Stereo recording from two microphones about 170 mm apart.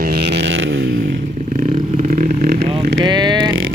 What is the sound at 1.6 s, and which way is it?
Vehicle, 50° right (ahead or behind).